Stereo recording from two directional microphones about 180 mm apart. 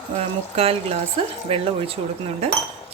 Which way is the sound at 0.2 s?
35° right (ahead or behind).